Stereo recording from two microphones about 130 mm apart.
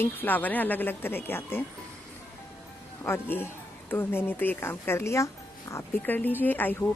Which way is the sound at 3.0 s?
15° left (ahead or behind).